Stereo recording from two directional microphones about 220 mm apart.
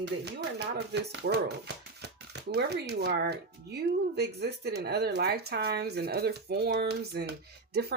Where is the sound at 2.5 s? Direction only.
50° right (ahead or behind).